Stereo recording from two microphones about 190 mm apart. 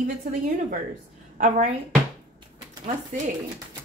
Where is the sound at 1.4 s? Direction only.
45° right (ahead or behind).